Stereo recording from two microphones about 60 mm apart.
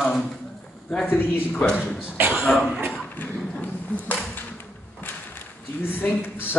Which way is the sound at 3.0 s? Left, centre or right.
Left.